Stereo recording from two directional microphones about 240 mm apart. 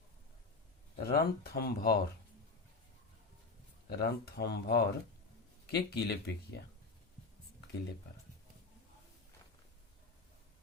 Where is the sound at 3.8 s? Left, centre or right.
Left.